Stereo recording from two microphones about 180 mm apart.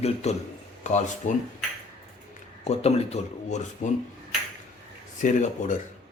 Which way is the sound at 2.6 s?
35° left (ahead or behind).